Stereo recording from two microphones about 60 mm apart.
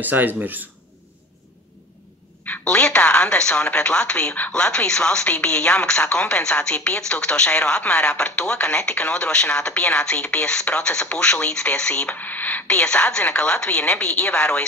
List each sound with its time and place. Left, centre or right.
0.0 s speech: right
2.6 s a woman's voice: centre
12.6 s a woman's voice: centre